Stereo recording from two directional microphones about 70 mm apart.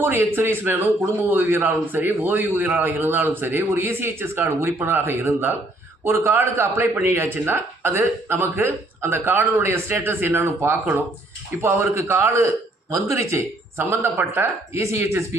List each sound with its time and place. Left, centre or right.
0.0 s a man's voice: right